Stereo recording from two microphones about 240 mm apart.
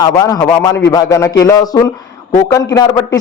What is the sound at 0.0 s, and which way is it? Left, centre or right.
Speech, centre.